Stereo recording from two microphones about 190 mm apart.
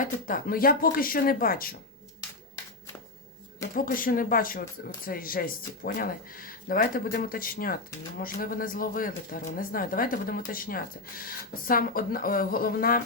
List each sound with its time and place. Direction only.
0.0 s speech: 45° left (ahead or behind)
3.8 s speech: 45° left (ahead or behind)